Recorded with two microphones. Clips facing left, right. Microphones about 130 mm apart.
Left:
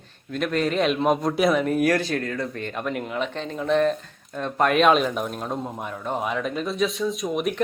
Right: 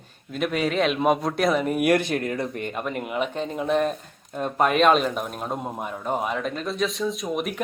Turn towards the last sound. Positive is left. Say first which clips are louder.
# left 2 dB
turn(degrees=0)  # may be behind; listen again after turning